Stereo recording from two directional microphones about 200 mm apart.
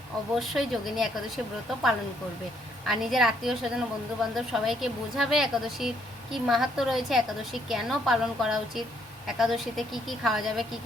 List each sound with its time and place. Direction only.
0.3 s a woman's voice: centre (ahead or behind)
2.8 s a woman's voice: centre (ahead or behind)